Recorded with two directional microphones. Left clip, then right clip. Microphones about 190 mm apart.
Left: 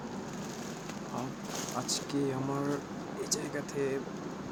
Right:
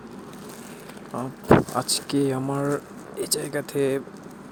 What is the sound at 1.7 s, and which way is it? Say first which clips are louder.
Speech: right 9 dB; 45° right (ahead or behind).